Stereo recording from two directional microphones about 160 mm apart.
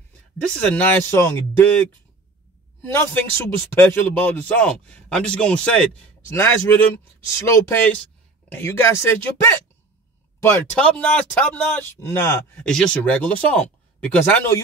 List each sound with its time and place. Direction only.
0.4 s speech: 10° left (ahead or behind)
10.7 s speech: 5° left (ahead or behind)